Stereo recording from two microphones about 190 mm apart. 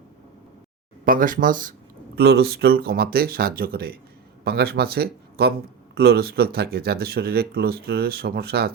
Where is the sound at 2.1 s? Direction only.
55° right (ahead or behind).